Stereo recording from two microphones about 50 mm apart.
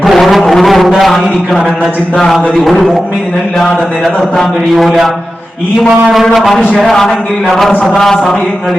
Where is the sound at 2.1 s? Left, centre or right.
Centre.